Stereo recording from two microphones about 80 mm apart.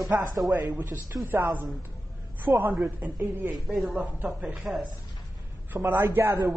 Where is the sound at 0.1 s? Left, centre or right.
Right.